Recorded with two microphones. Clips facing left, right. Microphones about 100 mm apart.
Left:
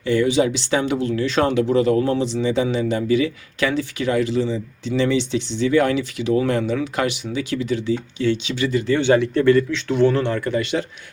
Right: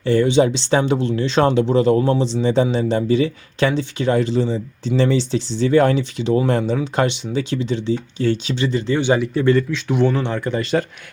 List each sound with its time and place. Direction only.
0.0 s speech: 35° right (ahead or behind)
8.2 s speech: 40° right (ahead or behind)
8.5 s speech: 30° right (ahead or behind)
9.0 s speech: 15° right (ahead or behind)